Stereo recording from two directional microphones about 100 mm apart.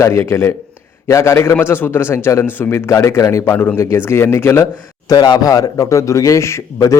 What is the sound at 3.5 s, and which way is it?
A man's voice, 20° left (ahead or behind).